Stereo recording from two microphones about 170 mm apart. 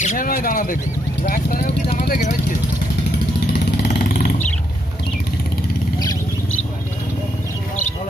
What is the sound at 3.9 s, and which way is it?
Vehicle, 60° left (ahead or behind).